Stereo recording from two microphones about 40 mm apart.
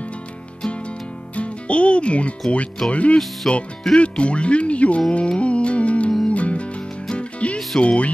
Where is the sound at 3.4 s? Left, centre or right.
Centre.